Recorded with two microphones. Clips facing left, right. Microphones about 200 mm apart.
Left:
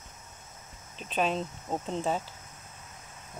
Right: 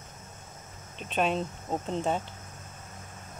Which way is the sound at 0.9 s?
Centre (ahead or behind).